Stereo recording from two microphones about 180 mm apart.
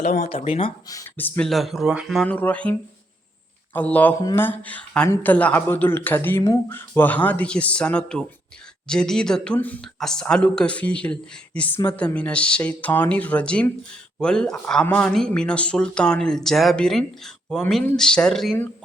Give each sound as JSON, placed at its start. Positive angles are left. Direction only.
{"t": 0.0, "sound": "speech", "side_deg": 40}
{"t": 0.9, "sound": "speech", "side_deg": 15}
{"t": 3.8, "sound": "speech", "side_deg": 10}